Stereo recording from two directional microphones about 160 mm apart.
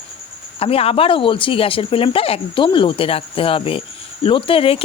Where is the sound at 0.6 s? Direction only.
35° left (ahead or behind).